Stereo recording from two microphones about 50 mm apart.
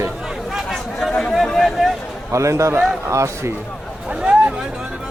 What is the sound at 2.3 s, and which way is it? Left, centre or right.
Speech, right.